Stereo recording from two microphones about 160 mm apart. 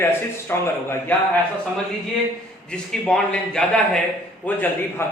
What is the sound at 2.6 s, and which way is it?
A man's voice, 5° left (ahead or behind).